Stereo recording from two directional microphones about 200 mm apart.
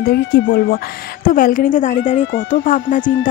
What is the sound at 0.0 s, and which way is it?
Music, 50° left (ahead or behind).